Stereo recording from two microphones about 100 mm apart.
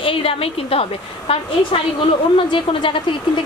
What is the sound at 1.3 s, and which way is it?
A woman's voice, 60° left (ahead or behind).